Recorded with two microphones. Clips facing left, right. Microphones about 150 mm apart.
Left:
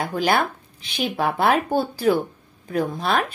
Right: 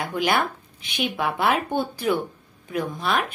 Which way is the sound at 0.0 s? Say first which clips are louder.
Left 2 dB; 35° left (ahead or behind).